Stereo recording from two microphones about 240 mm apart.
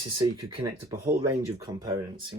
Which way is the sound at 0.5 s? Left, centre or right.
Centre.